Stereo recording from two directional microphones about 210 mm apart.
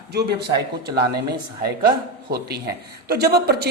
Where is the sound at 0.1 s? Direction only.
50° right (ahead or behind).